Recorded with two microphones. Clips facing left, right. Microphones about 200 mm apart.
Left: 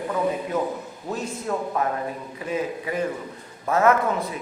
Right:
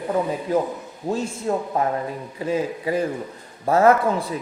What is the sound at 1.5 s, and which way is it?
A man's voice, 25° right (ahead or behind).